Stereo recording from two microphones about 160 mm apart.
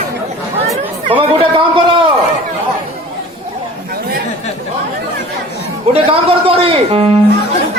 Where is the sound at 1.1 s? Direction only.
35° right (ahead or behind).